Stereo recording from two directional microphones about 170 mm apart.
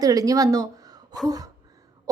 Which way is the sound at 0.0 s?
20° right (ahead or behind).